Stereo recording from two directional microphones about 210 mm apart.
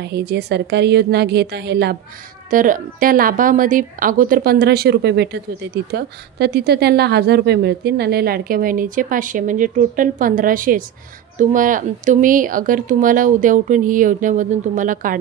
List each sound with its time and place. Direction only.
0.0 s a woman's voice: 50° right (ahead or behind)
2.5 s a woman's voice: 40° right (ahead or behind)